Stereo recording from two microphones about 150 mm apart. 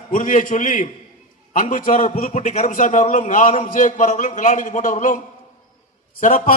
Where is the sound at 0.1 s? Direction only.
60° left (ahead or behind).